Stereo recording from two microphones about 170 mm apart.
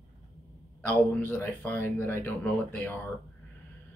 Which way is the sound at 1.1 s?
15° left (ahead or behind).